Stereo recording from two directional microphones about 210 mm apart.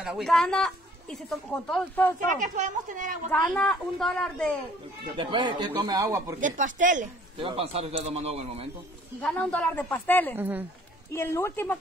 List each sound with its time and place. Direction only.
0.0 s speech: centre (ahead or behind)
2.4 s a woman's voice: 35° right (ahead or behind)
3.3 s speech: 5° left (ahead or behind)
5.1 s a man's voice: 25° right (ahead or behind)
6.4 s a woman's voice: 40° right (ahead or behind)
7.3 s a man's voice: 25° right (ahead or behind)
9.2 s speech: 5° left (ahead or behind)
10.3 s a man's voice: 10° right (ahead or behind)
11.1 s speech: 10° left (ahead or behind)